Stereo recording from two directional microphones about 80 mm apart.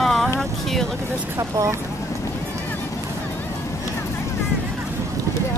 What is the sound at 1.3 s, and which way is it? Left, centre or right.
Speech, right.